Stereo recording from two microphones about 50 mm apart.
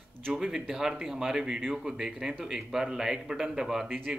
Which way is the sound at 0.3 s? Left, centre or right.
Centre.